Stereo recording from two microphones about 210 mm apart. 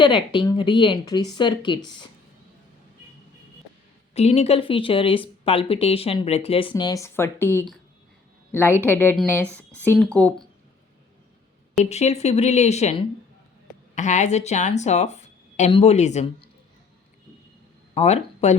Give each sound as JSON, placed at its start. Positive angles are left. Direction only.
{"t": 0.0, "sound": "speech", "side_deg": 25}
{"t": 4.1, "sound": "a woman's voice", "side_deg": 30}
{"t": 11.8, "sound": "speech", "side_deg": 30}
{"t": 17.9, "sound": "speech", "side_deg": 30}